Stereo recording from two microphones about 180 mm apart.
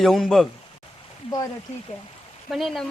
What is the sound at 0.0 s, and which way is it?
Speech, centre (ahead or behind).